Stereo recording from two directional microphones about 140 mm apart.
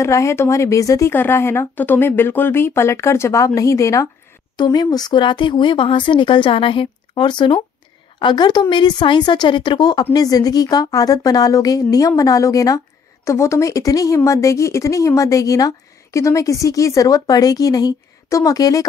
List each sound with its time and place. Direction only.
0.0 s a woman's voice: 20° left (ahead or behind)